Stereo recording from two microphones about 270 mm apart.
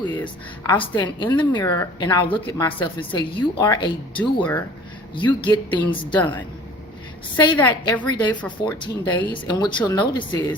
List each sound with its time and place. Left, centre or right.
0.0 s a woman's voice: centre
6.1 s a woman's voice: centre
7.3 s a woman's voice: centre
8.8 s a woman's voice: centre